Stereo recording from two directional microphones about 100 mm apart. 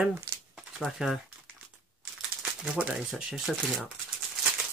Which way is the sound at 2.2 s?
5° right (ahead or behind).